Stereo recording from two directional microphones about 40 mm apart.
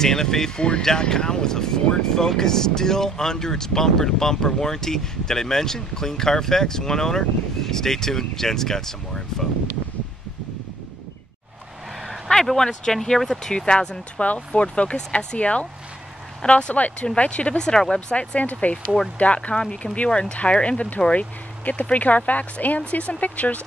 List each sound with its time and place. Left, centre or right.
0.0 s speech: centre
0.6 s speech: left
12.5 s speech: centre; by 17.6 s left
17.6 s speech: centre
18.1 s speech: left